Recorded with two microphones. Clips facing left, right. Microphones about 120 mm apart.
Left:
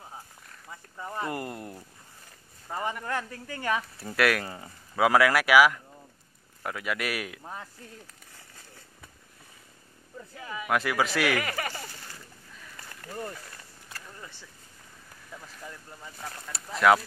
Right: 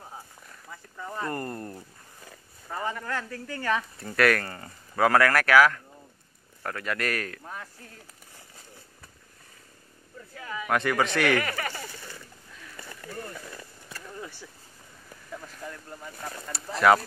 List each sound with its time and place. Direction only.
0.7 s a sound: 15° left (ahead or behind)
2.7 s speech: 15° left (ahead or behind)
4.0 s speech: 5° left (ahead or behind)
10.3 s speech: 15° left (ahead or behind)
10.7 s speech: 5° left (ahead or behind)
16.0 s speech: centre (ahead or behind)